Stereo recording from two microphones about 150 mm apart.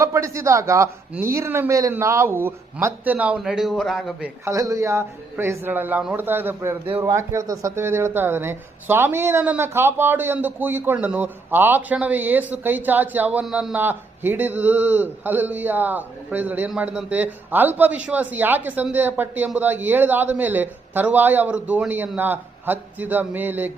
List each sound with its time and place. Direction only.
0.0 s speech: 20° right (ahead or behind); by 4.3 s centre (ahead or behind)
4.4 s speech: 20° right (ahead or behind)